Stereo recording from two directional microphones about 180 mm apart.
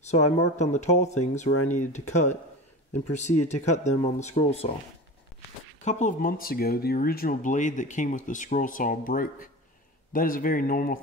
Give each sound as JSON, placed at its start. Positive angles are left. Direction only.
{"t": 0.1, "sound": "speech", "side_deg": 40}
{"t": 5.9, "sound": "speech", "side_deg": 40}